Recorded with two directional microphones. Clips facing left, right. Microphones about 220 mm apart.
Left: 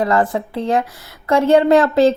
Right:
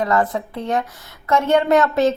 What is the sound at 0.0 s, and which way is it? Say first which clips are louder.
A woman's voice: left 2 dB; 30° left (ahead or behind).